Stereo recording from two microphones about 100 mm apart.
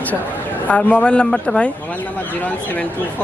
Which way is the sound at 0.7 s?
15° left (ahead or behind).